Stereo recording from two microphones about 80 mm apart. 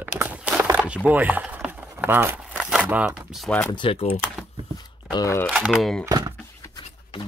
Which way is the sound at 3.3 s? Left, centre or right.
Centre.